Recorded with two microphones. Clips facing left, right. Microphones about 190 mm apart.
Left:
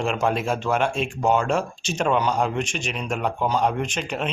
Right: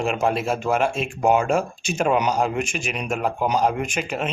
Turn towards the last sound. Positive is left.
turn(degrees=-5)  # may be behind; listen again after turning